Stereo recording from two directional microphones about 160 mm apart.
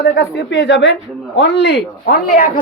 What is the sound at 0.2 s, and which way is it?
Speech, 90° left.